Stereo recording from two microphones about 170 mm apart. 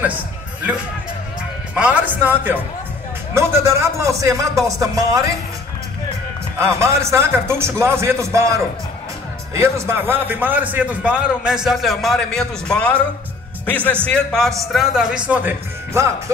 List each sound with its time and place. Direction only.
1.8 s a man's voice: 10° right (ahead or behind)
6.6 s a man's voice: 15° right (ahead or behind)